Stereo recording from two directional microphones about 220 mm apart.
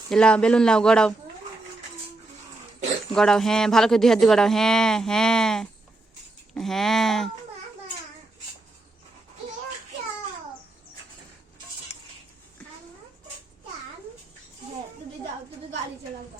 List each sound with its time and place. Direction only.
0.1 s speech: 5° left (ahead or behind)
3.2 s speech: centre (ahead or behind)